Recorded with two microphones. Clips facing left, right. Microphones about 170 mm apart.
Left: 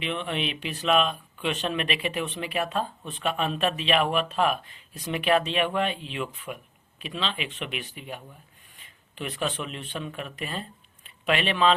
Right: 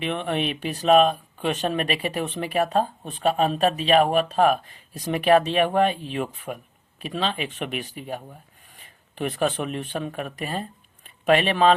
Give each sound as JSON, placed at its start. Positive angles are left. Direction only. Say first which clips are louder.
{"t": 0.0, "sound": "speech", "louder": "right 4 dB", "side_deg": -45}